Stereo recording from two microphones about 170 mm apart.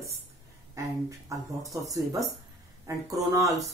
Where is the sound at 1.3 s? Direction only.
20° right (ahead or behind).